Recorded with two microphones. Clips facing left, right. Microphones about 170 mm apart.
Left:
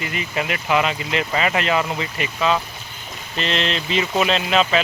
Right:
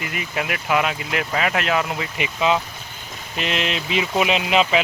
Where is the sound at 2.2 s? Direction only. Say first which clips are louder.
Right 1 dB; 15° right (ahead or behind).